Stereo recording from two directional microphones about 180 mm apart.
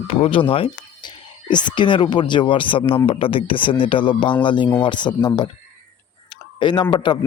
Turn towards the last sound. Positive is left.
turn(degrees=25)  # may be behind; listen again after turning